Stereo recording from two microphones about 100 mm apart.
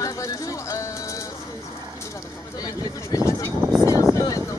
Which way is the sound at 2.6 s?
35° left (ahead or behind).